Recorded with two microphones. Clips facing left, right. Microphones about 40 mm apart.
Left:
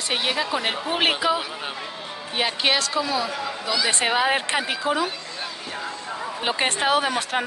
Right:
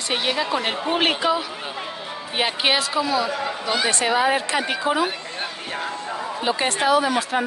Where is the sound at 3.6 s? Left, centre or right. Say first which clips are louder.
Right 1 dB; right.